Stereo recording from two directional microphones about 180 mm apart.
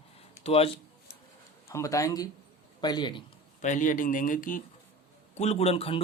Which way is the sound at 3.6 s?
45° left (ahead or behind).